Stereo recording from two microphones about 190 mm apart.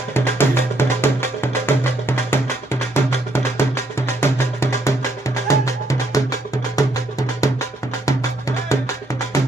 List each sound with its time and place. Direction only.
0.1 s music: 10° left (ahead or behind)